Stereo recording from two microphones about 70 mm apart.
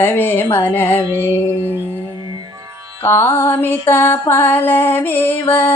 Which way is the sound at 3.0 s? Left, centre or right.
Left.